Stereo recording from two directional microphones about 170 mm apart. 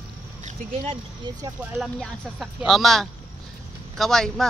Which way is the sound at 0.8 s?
30° right (ahead or behind).